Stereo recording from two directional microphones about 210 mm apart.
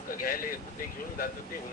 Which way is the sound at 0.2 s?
40° left (ahead or behind).